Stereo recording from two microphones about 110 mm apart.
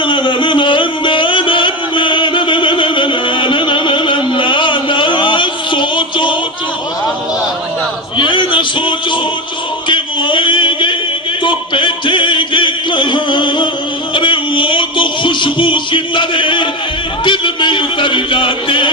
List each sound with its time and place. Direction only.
0.0 s music: 50° left (ahead or behind)
8.2 s a sound: 45° left (ahead or behind)
17.2 s music: 45° left (ahead or behind)